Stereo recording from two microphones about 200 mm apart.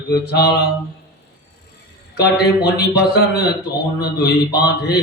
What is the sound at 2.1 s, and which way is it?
Speech, 50° left (ahead or behind).